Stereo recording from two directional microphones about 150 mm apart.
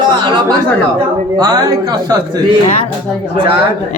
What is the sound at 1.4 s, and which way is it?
A woman's voice, 25° right (ahead or behind).